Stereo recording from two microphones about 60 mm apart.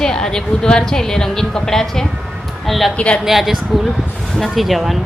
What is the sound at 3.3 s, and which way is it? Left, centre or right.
Speech, centre.